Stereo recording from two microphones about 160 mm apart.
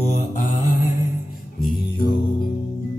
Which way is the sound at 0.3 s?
45° left (ahead or behind).